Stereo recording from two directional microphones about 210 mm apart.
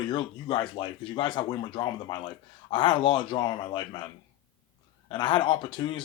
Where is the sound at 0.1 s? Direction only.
25° left (ahead or behind).